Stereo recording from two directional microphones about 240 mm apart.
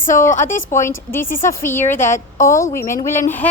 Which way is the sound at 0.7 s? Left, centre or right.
Centre.